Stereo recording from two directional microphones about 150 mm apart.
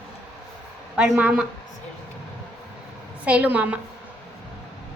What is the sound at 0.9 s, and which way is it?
Speech, 5° right (ahead or behind).